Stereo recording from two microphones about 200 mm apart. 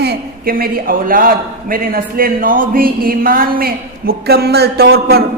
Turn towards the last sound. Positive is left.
turn(degrees=-50)  # may be behind; listen again after turning